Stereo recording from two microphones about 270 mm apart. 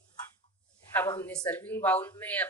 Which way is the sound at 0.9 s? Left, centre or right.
Centre.